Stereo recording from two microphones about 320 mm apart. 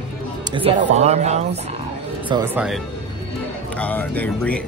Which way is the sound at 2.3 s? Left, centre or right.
Centre.